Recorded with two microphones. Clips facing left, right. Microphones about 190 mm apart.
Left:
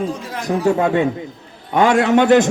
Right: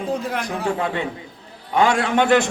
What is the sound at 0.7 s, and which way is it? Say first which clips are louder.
A man's voice: left 8 dB; 45° left (ahead or behind).